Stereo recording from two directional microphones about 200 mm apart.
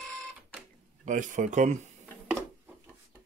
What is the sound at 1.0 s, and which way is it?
Speech, 40° right (ahead or behind).